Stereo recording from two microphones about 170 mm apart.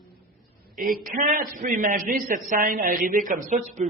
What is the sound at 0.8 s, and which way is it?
A man's voice, 50° right (ahead or behind).